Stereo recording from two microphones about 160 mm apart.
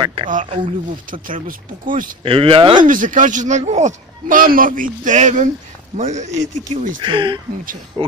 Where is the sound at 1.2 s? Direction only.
60° right (ahead or behind).